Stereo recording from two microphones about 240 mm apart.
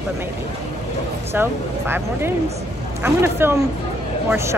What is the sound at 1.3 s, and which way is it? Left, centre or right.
Speech, centre.